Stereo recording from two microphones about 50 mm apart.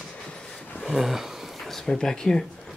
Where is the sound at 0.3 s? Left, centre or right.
Centre.